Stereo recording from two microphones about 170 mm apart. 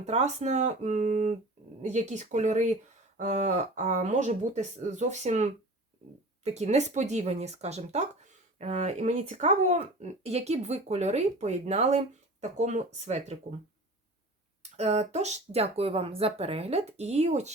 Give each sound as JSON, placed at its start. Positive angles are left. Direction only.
{"t": 0.0, "sound": "speech", "side_deg": -45}
{"t": 14.6, "sound": "speech", "side_deg": -40}